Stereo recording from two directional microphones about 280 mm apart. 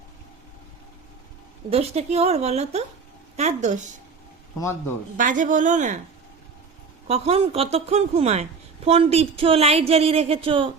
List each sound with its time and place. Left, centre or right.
1.7 s a woman's voice: right
5.1 s a woman's voice: right
7.1 s a woman's voice: right